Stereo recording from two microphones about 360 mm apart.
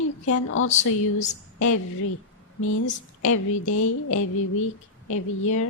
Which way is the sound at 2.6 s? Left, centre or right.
Left.